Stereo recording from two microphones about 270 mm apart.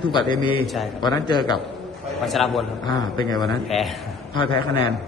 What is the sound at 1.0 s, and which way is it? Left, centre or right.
Speech, centre.